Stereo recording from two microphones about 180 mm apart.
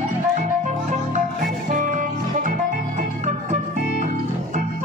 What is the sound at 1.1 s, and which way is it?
Music, 45° right (ahead or behind).